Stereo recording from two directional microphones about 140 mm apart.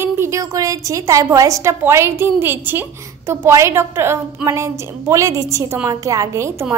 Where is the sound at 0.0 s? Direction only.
20° right (ahead or behind).